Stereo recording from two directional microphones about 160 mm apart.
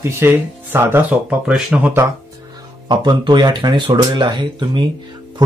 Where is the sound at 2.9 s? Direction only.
30° right (ahead or behind).